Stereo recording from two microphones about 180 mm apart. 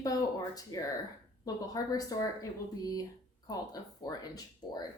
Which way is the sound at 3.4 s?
20° left (ahead or behind).